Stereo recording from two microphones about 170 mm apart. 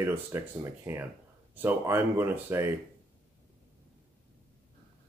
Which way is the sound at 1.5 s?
10° right (ahead or behind).